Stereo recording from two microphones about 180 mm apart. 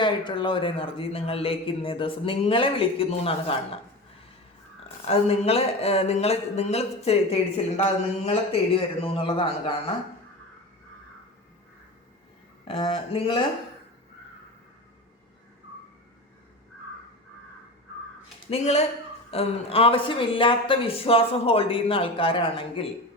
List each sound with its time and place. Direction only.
0.0 s speech: 25° left (ahead or behind)
5.0 s speech: 35° left (ahead or behind)
12.6 s speech: 30° left (ahead or behind)
18.5 s speech: 35° left (ahead or behind)